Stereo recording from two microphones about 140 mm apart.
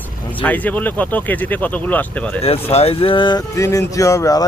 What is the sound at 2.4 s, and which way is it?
Speech, 45° left (ahead or behind).